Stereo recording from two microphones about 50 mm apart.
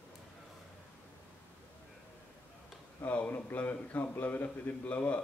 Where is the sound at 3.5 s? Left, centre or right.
Left.